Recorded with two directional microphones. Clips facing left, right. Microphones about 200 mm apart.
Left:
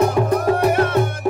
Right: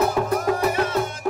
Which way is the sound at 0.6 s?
60° left (ahead or behind).